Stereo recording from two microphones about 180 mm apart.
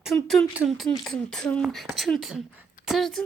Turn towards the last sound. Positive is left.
turn(degrees=0)  # may be behind; listen again after turning